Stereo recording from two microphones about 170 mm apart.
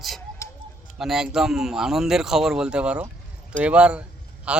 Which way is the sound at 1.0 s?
5° right (ahead or behind).